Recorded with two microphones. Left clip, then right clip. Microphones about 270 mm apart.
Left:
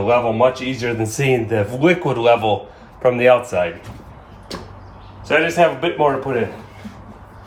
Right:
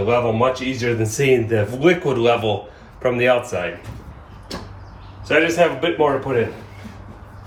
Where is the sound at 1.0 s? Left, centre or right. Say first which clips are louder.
Right 2 dB; centre.